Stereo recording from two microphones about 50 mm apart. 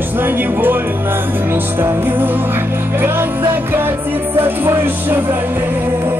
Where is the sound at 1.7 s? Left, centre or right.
Right.